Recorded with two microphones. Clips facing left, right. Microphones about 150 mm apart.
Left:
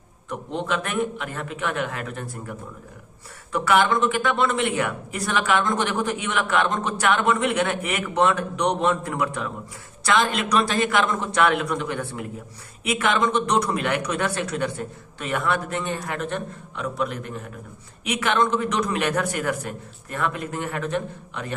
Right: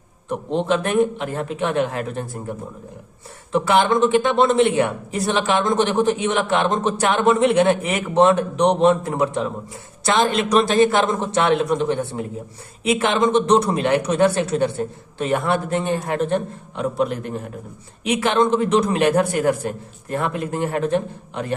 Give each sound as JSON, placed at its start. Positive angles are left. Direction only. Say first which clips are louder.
{"t": 0.5, "sound": "speech", "louder": "right 7 dB", "side_deg": -30}